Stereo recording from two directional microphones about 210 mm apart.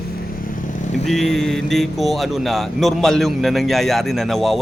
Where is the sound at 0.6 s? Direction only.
40° left (ahead or behind).